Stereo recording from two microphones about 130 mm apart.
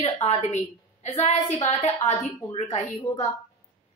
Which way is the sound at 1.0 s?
60° left (ahead or behind).